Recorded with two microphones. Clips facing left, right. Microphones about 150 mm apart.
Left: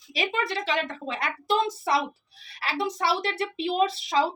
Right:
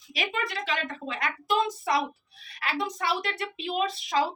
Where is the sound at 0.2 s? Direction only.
30° left (ahead or behind).